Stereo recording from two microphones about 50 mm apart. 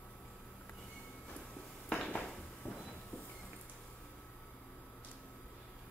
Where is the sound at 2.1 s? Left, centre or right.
Left.